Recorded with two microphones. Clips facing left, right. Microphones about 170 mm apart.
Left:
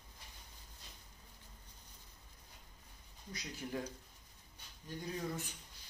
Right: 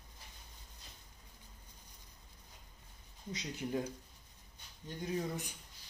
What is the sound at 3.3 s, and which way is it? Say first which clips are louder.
Speech: right 4 dB; 20° right (ahead or behind).